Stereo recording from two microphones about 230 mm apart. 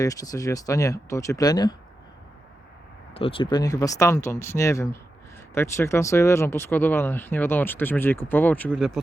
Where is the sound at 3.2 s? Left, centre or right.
Left; by 9.0 s centre.